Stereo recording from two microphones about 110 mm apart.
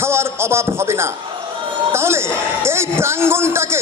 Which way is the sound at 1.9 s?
25° right (ahead or behind).